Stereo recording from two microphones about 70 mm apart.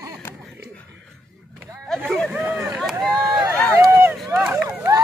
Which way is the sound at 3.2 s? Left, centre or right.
Right.